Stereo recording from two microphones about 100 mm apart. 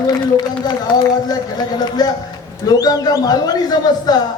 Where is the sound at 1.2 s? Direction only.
40° left (ahead or behind).